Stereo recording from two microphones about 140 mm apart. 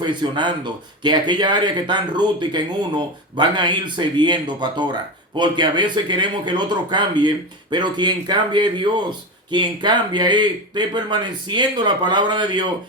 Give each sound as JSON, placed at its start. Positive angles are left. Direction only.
{"t": 0.0, "sound": "speech", "side_deg": -35}